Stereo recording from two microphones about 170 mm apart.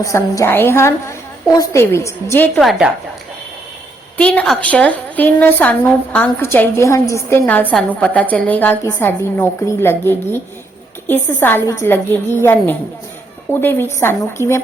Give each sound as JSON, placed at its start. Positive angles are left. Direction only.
{"t": 0.0, "sound": "a woman's voice", "side_deg": 15}
{"t": 2.6, "sound": "speech", "side_deg": 0}
{"t": 4.2, "sound": "a woman's voice", "side_deg": 5}